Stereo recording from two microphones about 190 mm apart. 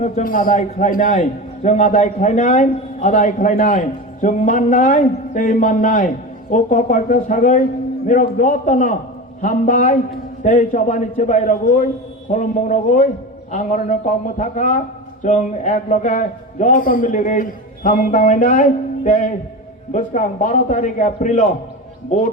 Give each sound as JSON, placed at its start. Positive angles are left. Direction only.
{"t": 0.0, "sound": "a man's voice", "side_deg": 45}